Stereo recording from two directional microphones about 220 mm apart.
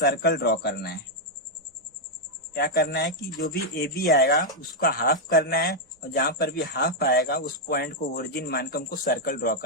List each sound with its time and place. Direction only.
0.0 s speech: 50° left (ahead or behind)
2.5 s speech: 45° left (ahead or behind)